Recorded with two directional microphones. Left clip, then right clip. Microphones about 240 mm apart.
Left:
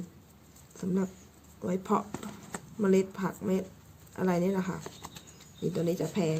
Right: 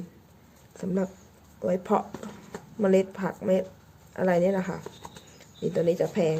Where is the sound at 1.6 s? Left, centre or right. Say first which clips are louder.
Right 5 dB; left.